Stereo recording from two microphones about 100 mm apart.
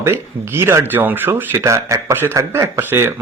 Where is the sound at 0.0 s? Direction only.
25° right (ahead or behind).